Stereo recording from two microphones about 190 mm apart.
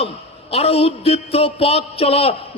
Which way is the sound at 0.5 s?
30° left (ahead or behind).